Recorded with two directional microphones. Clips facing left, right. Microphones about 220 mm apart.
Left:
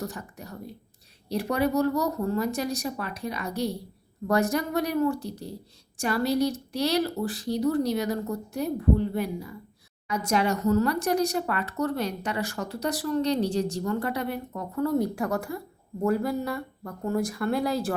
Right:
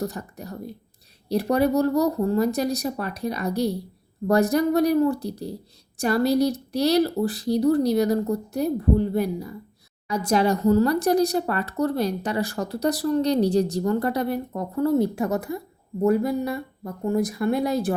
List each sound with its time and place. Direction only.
0.0 s speech: 35° right (ahead or behind); by 17.9 s 20° right (ahead or behind)